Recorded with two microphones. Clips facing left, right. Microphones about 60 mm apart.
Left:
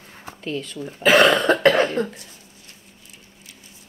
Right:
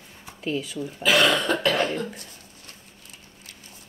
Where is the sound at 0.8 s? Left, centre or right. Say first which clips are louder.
Left 6 dB; left.